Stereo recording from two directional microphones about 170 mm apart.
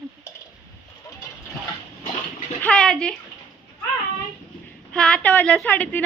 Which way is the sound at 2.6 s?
5° left (ahead or behind).